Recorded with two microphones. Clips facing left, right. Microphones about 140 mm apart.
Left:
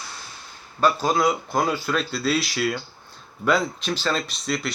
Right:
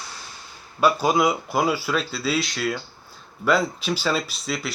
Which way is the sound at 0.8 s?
10° right (ahead or behind).